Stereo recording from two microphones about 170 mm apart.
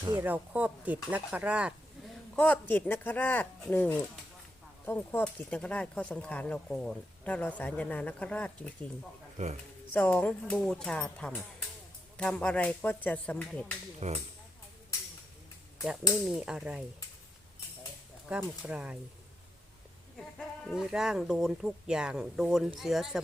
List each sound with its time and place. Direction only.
0.2 s speech: 10° right (ahead or behind)
2.3 s speech: 5° left (ahead or behind)
9.4 s speech: 45° right (ahead or behind)
9.9 s speech: 10° left (ahead or behind)
14.0 s speech: 40° right (ahead or behind)
16.3 s speech: 5° right (ahead or behind)
18.3 s speech: 5° right (ahead or behind)
20.7 s speech: 5° right (ahead or behind)